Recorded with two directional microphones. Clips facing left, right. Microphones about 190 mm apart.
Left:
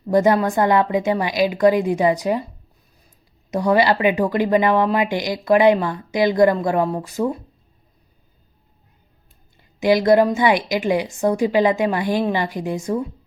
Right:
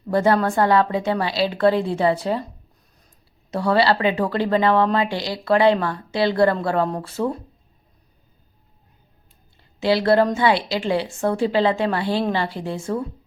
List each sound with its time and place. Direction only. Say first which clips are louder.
0.1 s a woman's voice: left 2 dB; 15° left (ahead or behind)
3.5 s a woman's voice: left 2 dB; 15° left (ahead or behind)
9.8 s a woman's voice: left 3 dB; 15° left (ahead or behind)